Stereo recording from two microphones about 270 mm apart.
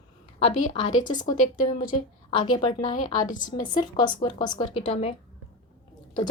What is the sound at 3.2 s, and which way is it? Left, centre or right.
Speech, left.